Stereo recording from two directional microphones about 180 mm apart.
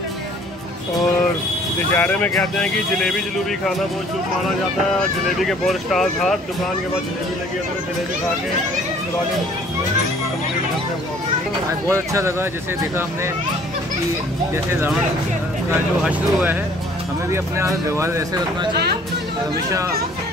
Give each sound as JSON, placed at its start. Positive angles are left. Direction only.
{"t": 2.0, "sound": "speech", "side_deg": 10}
{"t": 5.4, "sound": "speech", "side_deg": 0}
{"t": 11.9, "sound": "speech", "side_deg": -15}
{"t": 14.5, "sound": "speech", "side_deg": -15}
{"t": 16.0, "sound": "speech", "side_deg": -10}